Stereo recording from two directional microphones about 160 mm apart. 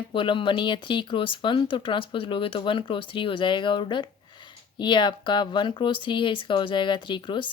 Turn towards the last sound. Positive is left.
turn(degrees=30)  # may be behind; listen again after turning